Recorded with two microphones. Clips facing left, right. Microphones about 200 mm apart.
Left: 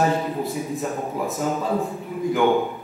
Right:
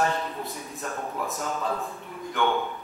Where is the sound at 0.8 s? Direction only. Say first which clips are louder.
Left 6 dB; 15° left (ahead or behind).